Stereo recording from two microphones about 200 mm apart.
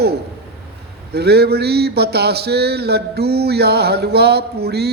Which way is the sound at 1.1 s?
55° right (ahead or behind).